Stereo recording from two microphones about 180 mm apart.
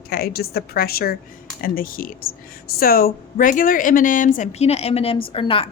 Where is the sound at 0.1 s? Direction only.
55° left (ahead or behind).